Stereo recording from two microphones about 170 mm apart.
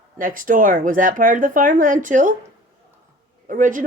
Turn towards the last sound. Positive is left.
turn(degrees=-50)  # may be behind; listen again after turning